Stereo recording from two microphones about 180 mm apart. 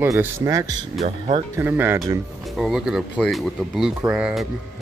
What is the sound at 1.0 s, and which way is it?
Speech, 35° right (ahead or behind).